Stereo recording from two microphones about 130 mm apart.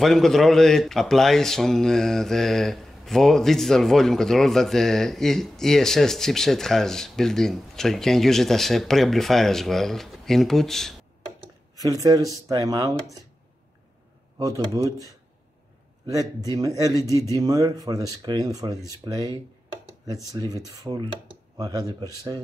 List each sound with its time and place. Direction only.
0.0 s speech: 5° left (ahead or behind)
11.7 s speech: 30° right (ahead or behind)
14.4 s speech: 25° right (ahead or behind)
17.1 s speech: 20° left (ahead or behind)
17.4 s speech: 30° right (ahead or behind)